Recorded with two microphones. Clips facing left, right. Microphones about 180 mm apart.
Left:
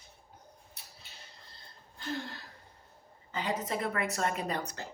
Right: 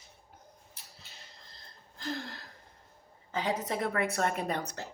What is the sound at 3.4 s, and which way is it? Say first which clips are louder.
Speech: right 1 dB; 65° right (ahead or behind).